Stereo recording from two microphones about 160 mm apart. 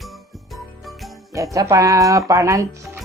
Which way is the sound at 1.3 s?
20° right (ahead or behind).